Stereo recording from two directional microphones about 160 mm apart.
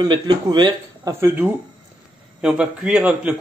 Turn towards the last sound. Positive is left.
turn(degrees=-5)  # may be behind; listen again after turning